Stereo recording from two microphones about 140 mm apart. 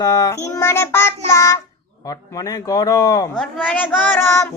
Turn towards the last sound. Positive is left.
turn(degrees=20)  # may be behind; listen again after turning